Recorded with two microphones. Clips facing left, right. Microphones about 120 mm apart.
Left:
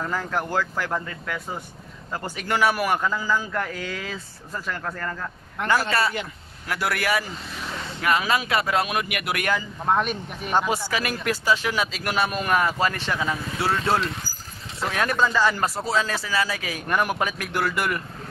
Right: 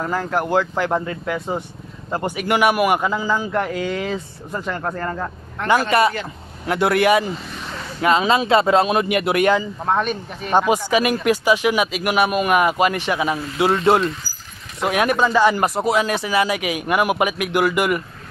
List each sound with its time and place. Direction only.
0.5 s speech: 20° right (ahead or behind)
5.7 s speech: 20° right (ahead or behind)
9.8 s speech: 5° left (ahead or behind)
10.5 s speech: 15° right (ahead or behind)
14.8 s speech: 15° right (ahead or behind)